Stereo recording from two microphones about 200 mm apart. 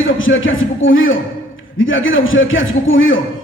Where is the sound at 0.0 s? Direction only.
75° left (ahead or behind).